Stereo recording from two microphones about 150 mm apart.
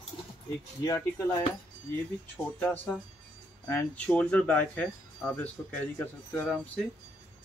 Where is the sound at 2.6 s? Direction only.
10° left (ahead or behind).